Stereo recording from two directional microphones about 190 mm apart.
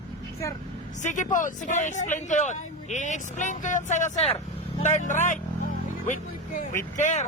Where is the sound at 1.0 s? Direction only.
40° left (ahead or behind).